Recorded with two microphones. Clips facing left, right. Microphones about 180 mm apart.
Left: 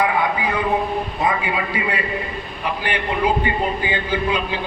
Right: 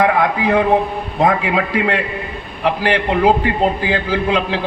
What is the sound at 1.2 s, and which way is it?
A man's voice, 70° right (ahead or behind).